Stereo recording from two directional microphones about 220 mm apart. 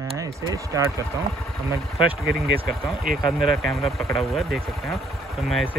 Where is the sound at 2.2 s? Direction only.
Centre (ahead or behind).